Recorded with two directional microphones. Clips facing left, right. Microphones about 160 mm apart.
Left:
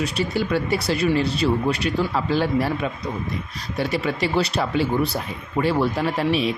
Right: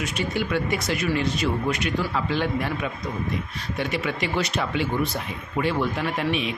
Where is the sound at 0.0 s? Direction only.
35° left (ahead or behind).